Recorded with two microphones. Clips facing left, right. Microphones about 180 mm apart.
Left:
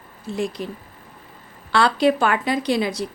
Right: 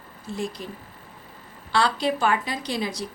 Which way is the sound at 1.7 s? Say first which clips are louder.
Left 6 dB; 60° left (ahead or behind).